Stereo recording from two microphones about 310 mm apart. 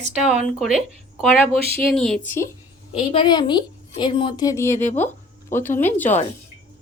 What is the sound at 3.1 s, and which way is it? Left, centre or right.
A woman's voice, centre.